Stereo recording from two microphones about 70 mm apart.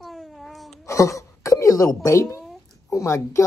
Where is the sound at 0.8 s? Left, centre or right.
Left.